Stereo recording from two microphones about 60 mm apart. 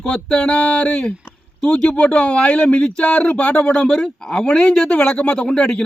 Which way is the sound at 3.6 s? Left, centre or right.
Centre.